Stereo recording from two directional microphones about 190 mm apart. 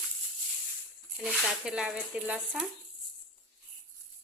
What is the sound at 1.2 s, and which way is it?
A woman's voice, 5° right (ahead or behind).